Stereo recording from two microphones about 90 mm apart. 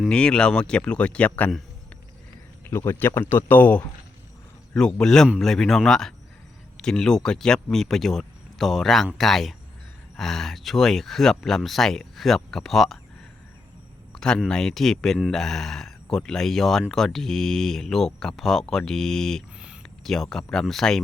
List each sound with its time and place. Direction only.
0.1 s speech: 10° left (ahead or behind)
2.6 s speech: 25° left (ahead or behind); by 13.0 s centre (ahead or behind)
14.2 s speech: 5° left (ahead or behind)
19.5 s a sound: 10° right (ahead or behind)
20.1 s speech: 5° left (ahead or behind)